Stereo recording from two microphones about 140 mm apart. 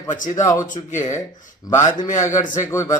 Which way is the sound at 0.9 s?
60° left (ahead or behind).